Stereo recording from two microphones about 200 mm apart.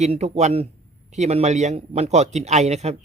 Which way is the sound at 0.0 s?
30° right (ahead or behind).